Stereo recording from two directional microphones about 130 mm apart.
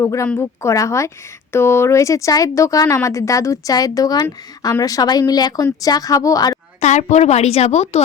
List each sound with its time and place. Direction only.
0.0 s speech: 25° left (ahead or behind)
6.7 s a woman's voice: 65° left (ahead or behind)